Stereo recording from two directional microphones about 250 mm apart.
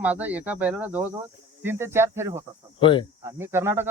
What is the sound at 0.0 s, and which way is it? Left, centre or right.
Speech, centre.